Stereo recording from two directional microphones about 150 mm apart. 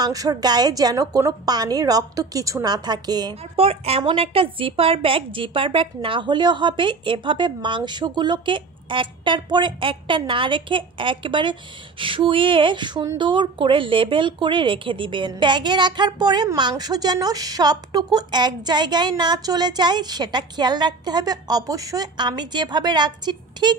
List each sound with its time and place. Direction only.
0.0 s a woman's voice: 25° right (ahead or behind)
3.5 s a woman's voice: 40° right (ahead or behind)